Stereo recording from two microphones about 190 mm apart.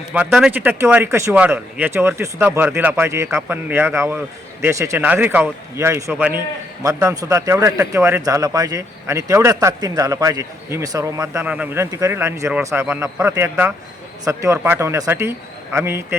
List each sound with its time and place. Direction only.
0.1 s speech: 10° right (ahead or behind)